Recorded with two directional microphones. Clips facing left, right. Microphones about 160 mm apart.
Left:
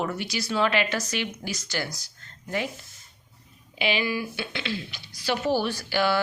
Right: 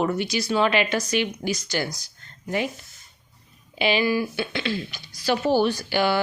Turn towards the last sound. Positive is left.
turn(degrees=-15)  # may be behind; listen again after turning